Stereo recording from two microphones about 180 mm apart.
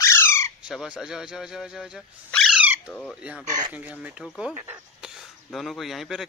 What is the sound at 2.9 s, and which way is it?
Speech, 5° left (ahead or behind).